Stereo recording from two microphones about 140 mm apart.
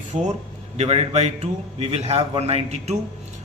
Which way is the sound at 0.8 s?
50° right (ahead or behind).